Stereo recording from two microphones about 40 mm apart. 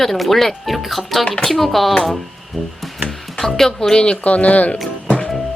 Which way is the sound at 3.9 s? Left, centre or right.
Left.